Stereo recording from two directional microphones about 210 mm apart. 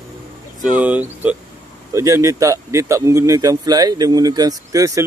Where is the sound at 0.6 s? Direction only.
5° right (ahead or behind).